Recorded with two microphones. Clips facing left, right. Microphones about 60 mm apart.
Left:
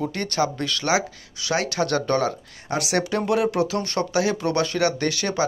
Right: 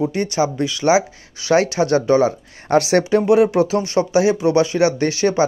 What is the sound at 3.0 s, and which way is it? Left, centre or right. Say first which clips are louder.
Speech: right 8 dB; right.